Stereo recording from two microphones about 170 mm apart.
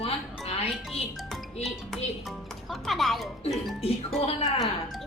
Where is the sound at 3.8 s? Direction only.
35° left (ahead or behind).